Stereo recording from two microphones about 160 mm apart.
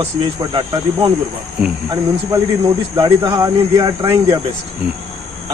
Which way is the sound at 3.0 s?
25° right (ahead or behind).